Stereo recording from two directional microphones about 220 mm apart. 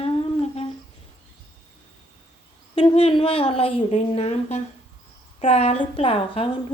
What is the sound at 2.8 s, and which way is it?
Speech, 25° left (ahead or behind).